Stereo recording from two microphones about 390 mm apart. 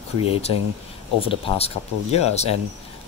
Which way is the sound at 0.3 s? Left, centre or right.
Centre.